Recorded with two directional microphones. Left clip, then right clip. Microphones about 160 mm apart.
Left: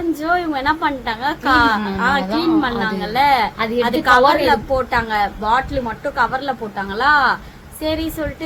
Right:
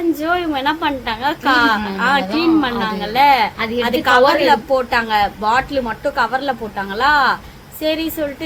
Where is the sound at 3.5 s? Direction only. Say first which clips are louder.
Left 1 dB; 20° left (ahead or behind).